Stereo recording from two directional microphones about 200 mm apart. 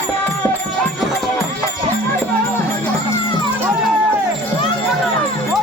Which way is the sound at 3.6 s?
10° right (ahead or behind).